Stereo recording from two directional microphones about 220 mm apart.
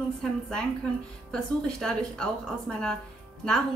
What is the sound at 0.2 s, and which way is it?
A woman's voice, 5° left (ahead or behind).